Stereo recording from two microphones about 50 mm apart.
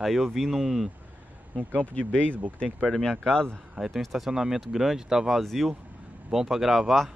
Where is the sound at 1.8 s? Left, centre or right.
Left.